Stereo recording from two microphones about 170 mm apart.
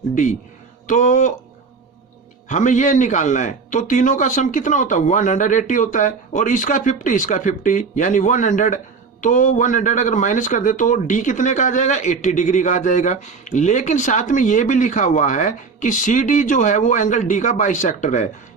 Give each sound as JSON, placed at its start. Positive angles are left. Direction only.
{"t": 0.1, "sound": "a man's voice", "side_deg": 50}
{"t": 2.5, "sound": "a man's voice", "side_deg": 45}